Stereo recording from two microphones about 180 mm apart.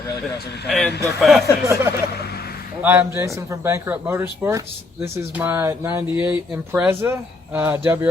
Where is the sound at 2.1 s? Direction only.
60° left (ahead or behind).